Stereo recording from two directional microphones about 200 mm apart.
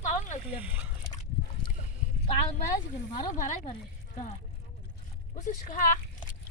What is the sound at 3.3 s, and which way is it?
Speech, 40° left (ahead or behind).